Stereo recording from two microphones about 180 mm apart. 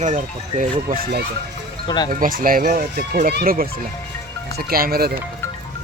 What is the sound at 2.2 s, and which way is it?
Speech, 50° right (ahead or behind).